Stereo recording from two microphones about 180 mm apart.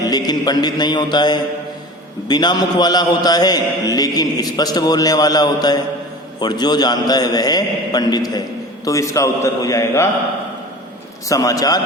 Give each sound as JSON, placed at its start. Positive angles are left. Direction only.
{"t": 0.1, "sound": "a man's voice", "side_deg": 20}
{"t": 11.3, "sound": "a man's voice", "side_deg": 20}